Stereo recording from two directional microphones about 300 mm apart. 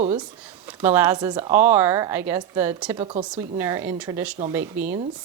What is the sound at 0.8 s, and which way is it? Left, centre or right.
A woman's voice, centre.